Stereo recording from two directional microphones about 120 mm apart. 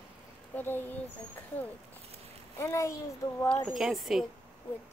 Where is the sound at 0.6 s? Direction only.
15° left (ahead or behind).